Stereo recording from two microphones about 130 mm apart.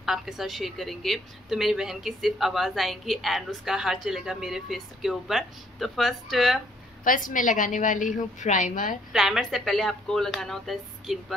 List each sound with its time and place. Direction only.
0.0 s speech: centre (ahead or behind)
7.1 s a woman's voice: 90° left
9.1 s speech: centre (ahead or behind)